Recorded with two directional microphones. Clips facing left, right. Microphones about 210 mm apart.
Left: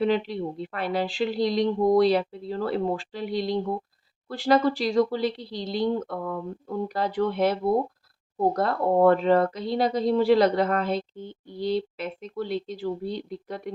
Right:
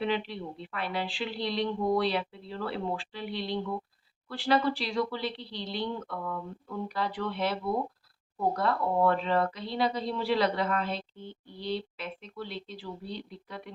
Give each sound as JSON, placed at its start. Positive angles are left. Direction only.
{"t": 0.0, "sound": "speech", "side_deg": 45}